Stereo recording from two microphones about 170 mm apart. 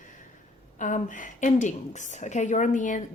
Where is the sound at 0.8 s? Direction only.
50° left (ahead or behind).